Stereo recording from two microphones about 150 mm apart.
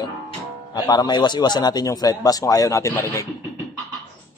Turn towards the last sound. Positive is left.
turn(degrees=20)  # may be behind; listen again after turning